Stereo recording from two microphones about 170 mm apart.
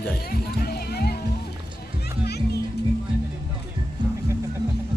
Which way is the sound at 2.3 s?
75° left (ahead or behind).